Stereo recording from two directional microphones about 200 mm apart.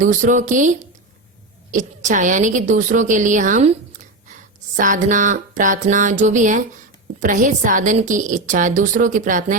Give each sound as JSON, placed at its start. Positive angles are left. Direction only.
{"t": 0.0, "sound": "a woman's voice", "side_deg": -40}